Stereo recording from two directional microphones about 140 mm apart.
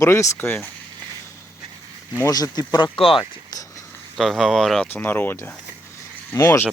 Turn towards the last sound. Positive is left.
turn(degrees=15)  # may be behind; listen again after turning